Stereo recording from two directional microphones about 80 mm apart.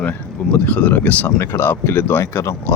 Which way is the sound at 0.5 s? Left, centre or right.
Centre.